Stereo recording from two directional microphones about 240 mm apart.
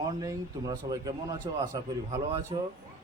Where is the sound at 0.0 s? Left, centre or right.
Centre.